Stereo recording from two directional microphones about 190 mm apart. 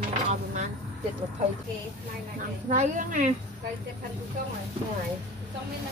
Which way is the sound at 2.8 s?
40° right (ahead or behind).